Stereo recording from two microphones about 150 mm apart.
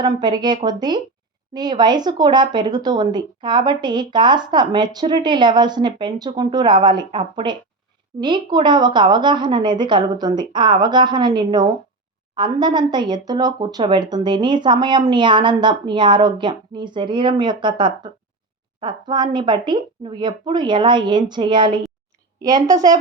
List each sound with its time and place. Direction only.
0.0 s speech: 30° right (ahead or behind)